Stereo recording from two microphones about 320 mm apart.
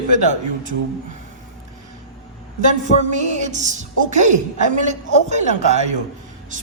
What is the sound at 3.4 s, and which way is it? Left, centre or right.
Speech, right.